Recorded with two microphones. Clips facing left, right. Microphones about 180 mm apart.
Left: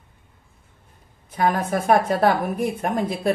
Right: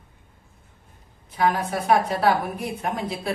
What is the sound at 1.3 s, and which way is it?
A woman's voice, 50° left (ahead or behind).